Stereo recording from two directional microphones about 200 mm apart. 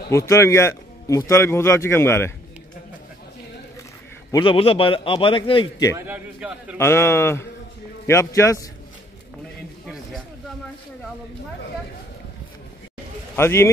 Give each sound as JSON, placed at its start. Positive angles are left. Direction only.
{"t": 0.3, "sound": "a man's voice", "side_deg": 15}
{"t": 4.3, "sound": "a man's voice", "side_deg": 25}
{"t": 5.9, "sound": "a man's voice", "side_deg": -10}
{"t": 6.8, "sound": "a man's voice", "side_deg": 15}
{"t": 13.4, "sound": "a man's voice", "side_deg": 10}